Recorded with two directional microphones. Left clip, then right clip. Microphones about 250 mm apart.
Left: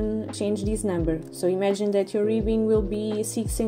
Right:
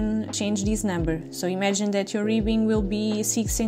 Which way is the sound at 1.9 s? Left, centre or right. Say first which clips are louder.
Left 2 dB; right.